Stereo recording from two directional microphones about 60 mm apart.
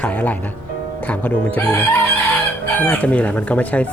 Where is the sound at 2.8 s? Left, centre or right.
Left.